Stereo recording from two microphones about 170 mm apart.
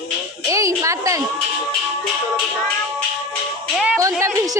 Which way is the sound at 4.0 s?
20° right (ahead or behind).